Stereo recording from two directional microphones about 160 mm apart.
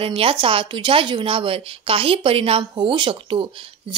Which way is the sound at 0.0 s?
35° right (ahead or behind).